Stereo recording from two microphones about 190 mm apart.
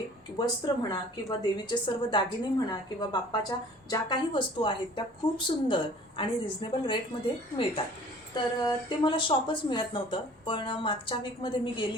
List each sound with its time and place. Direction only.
0.3 s speech: 20° left (ahead or behind)